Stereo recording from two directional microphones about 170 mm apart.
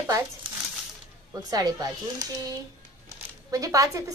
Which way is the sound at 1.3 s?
20° right (ahead or behind).